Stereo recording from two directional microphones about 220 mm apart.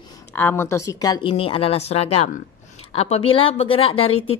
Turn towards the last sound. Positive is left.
turn(degrees=25)  # may be behind; listen again after turning